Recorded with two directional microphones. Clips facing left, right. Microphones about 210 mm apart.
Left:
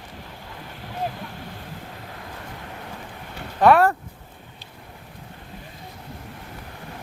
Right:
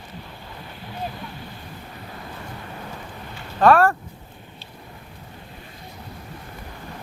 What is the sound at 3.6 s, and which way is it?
Speech, 15° left (ahead or behind).